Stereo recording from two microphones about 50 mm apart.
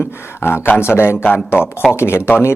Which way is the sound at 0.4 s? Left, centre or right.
Left.